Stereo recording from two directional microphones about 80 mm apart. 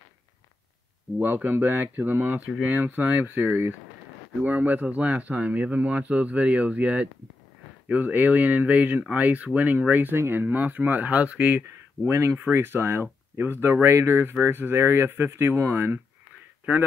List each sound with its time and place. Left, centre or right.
1.2 s speech: right
12.1 s speech: right